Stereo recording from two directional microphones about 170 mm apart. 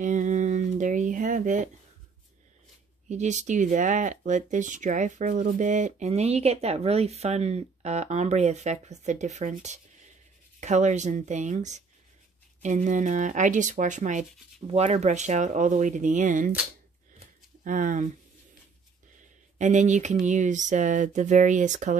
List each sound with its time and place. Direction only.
0.0 s a sound: 45° right (ahead or behind)
3.1 s speech: 45° right (ahead or behind)
17.6 s speech: 50° right (ahead or behind)
19.6 s speech: 45° right (ahead or behind)